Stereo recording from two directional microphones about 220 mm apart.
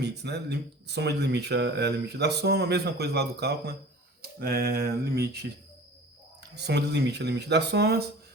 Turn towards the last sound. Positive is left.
turn(degrees=-50)  # may be behind; listen again after turning